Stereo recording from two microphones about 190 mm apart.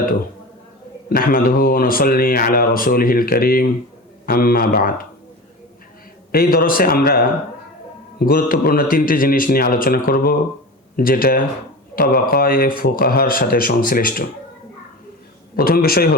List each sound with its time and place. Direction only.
1.1 s speech: 50° left (ahead or behind)
6.3 s speech: 50° left (ahead or behind)
15.5 s speech: 55° left (ahead or behind)